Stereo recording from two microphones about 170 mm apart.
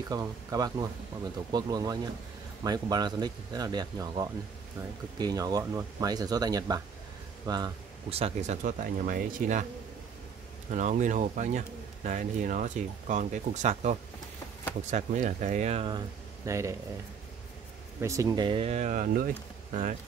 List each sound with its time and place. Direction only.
0.1 s speech: 20° right (ahead or behind)
8.1 s speech: 40° right (ahead or behind)
10.7 s speech: 45° right (ahead or behind)
16.4 s speech: 15° right (ahead or behind)
18.0 s speech: 20° right (ahead or behind); by 20.0 s 50° right (ahead or behind)